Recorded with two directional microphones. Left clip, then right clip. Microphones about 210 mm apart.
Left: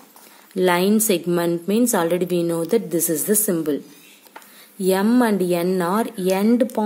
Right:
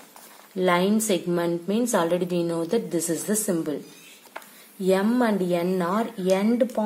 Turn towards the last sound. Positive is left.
turn(degrees=45)  # may be behind; listen again after turning